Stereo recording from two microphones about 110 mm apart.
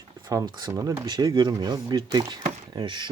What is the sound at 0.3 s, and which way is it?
Speech, 40° right (ahead or behind).